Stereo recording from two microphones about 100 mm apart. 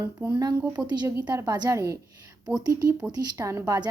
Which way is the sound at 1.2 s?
40° right (ahead or behind).